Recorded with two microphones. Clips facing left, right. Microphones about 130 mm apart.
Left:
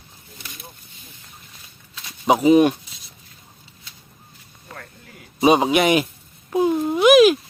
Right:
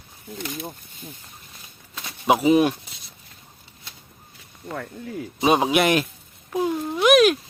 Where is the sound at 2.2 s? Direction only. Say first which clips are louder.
Left 3 dB; centre (ahead or behind).